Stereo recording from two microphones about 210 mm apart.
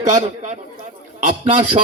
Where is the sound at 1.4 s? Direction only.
25° right (ahead or behind).